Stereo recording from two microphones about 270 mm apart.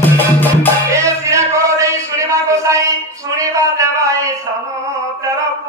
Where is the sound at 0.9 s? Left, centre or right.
Centre.